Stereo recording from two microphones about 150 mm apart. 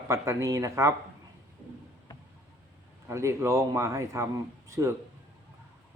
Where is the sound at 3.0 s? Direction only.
20° right (ahead or behind).